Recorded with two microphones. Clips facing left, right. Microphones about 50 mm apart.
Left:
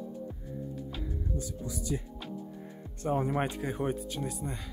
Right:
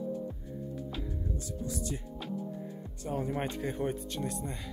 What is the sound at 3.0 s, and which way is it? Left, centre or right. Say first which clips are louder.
Speech: left 5 dB; left.